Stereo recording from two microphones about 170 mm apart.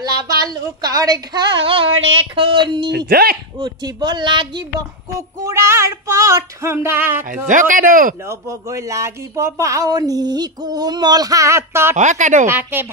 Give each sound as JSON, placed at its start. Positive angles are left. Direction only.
{"t": 0.0, "sound": "speech", "side_deg": -25}
{"t": 3.1, "sound": "speech", "side_deg": -65}
{"t": 3.5, "sound": "speech", "side_deg": -25}
{"t": 7.4, "sound": "speech", "side_deg": -50}
{"t": 8.3, "sound": "speech", "side_deg": -15}
{"t": 12.0, "sound": "speech", "side_deg": -45}
{"t": 12.4, "sound": "speech", "side_deg": -10}